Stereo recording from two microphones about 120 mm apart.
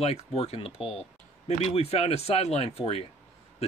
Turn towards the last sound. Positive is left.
turn(degrees=55)  # may be behind; listen again after turning